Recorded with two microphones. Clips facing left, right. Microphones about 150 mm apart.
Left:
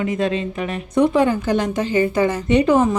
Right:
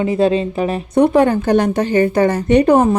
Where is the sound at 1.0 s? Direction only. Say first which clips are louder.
Right 4 dB; 60° right (ahead or behind).